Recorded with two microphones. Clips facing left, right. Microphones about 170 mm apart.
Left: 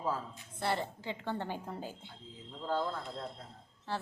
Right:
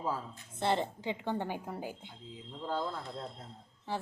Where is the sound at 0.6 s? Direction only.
20° right (ahead or behind).